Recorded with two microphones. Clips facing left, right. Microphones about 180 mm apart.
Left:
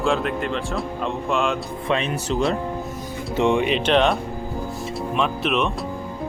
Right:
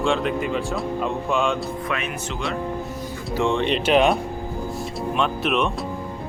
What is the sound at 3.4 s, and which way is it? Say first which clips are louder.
Speech: left 2 dB; 15° left (ahead or behind).